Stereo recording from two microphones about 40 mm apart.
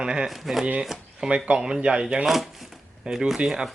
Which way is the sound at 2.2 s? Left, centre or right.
Centre.